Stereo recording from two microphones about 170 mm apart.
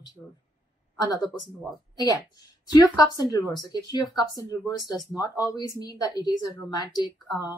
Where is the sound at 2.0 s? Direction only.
20° left (ahead or behind).